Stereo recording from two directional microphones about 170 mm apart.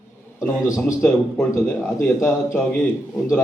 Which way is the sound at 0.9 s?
5° left (ahead or behind).